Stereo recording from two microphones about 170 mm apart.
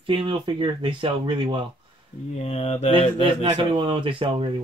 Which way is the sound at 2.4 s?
40° left (ahead or behind).